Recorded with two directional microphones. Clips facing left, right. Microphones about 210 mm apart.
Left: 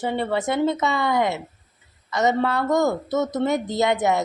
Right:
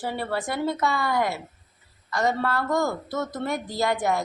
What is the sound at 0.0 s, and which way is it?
Speech, 20° left (ahead or behind).